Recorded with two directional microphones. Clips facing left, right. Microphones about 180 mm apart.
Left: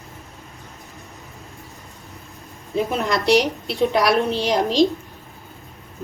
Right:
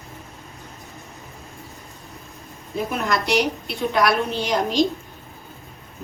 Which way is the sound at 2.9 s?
30° left (ahead or behind).